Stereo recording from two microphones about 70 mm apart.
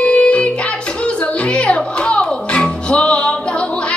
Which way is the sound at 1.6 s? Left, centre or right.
Centre.